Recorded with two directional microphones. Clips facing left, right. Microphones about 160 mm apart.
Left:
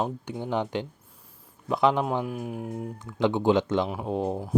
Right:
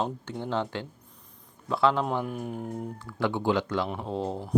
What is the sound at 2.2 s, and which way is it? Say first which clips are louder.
Speech: left 1 dB; 5° left (ahead or behind).